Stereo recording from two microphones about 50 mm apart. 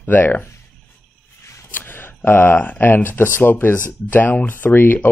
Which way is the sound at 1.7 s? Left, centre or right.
Left.